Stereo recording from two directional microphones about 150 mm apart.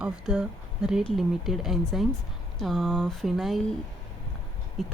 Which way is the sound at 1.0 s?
Centre (ahead or behind).